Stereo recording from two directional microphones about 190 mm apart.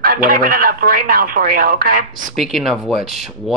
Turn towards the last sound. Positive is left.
turn(degrees=0)  # may be behind; listen again after turning